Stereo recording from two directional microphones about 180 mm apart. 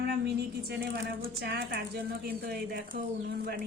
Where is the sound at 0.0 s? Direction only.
65° right (ahead or behind).